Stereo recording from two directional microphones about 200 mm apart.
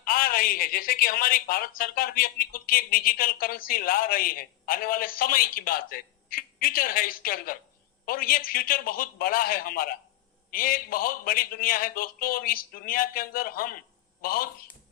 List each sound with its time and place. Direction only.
0.0 s a woman's voice: 45° left (ahead or behind)